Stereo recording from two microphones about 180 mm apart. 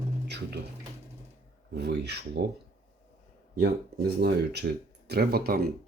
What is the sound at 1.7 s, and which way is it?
Speech, 65° right (ahead or behind).